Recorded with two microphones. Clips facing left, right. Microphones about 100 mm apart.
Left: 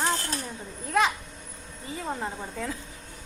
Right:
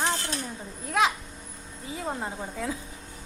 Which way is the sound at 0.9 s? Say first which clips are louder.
Even; centre (ahead or behind).